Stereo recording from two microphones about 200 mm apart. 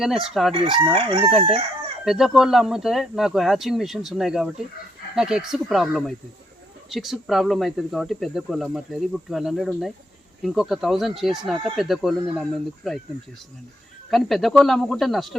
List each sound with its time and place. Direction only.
0.0 s speech: centre (ahead or behind)
0.5 s crowing: 30° right (ahead or behind)
1.3 s speech: centre (ahead or behind)
14.1 s speech: centre (ahead or behind)